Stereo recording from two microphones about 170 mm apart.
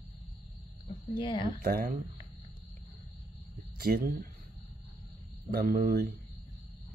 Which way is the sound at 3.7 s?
65° right (ahead or behind).